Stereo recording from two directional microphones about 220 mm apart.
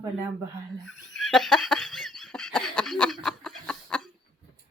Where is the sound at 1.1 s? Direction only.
Centre (ahead or behind).